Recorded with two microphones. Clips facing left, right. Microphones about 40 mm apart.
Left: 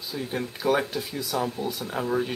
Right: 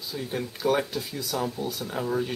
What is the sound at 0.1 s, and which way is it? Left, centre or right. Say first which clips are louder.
Speech: left 1 dB; centre.